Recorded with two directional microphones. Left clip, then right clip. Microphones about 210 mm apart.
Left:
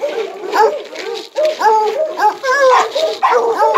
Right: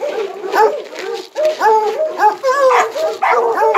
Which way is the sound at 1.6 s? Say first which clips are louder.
Even; 50° right (ahead or behind).